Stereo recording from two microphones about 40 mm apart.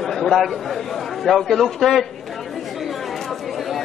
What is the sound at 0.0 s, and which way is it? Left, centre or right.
A man's voice, centre.